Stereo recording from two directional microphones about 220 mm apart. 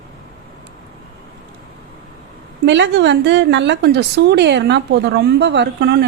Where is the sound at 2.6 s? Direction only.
55° right (ahead or behind).